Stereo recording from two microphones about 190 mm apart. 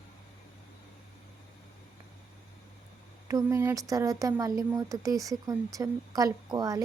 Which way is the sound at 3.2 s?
15° right (ahead or behind).